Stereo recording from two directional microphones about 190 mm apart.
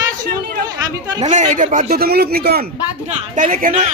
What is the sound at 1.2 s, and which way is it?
Speech, 40° right (ahead or behind).